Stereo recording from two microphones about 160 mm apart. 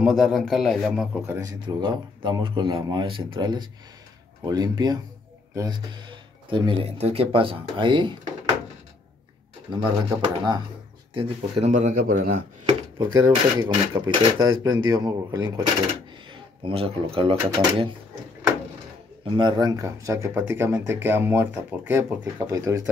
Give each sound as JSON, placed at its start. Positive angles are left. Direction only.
{"t": 0.0, "sound": "speech", "side_deg": 0}
{"t": 1.2, "sound": "speech", "side_deg": -20}
{"t": 9.7, "sound": "speech", "side_deg": -25}
{"t": 11.7, "sound": "a man's voice", "side_deg": -55}
{"t": 12.6, "sound": "speech", "side_deg": -25}
{"t": 16.3, "sound": "speech", "side_deg": -35}
{"t": 19.2, "sound": "speech", "side_deg": -30}